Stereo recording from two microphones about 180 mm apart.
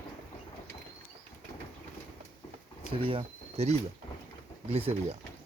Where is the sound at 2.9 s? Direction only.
30° right (ahead or behind).